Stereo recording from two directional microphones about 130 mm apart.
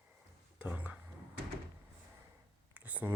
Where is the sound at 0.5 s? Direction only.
10° right (ahead or behind).